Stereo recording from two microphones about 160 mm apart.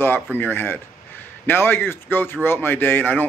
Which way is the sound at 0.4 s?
15° left (ahead or behind).